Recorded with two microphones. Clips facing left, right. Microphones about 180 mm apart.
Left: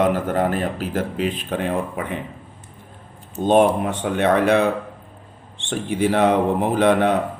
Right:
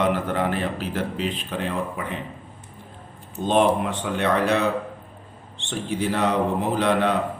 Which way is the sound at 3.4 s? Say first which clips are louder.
Left 4 dB; 50° left (ahead or behind).